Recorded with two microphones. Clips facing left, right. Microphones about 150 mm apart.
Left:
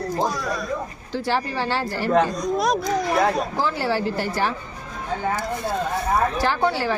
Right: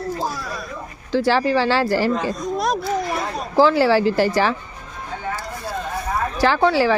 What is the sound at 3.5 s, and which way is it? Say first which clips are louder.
Speech: right 8 dB; 90° right.